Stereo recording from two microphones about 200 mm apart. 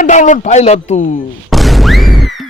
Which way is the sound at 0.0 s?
40° left (ahead or behind).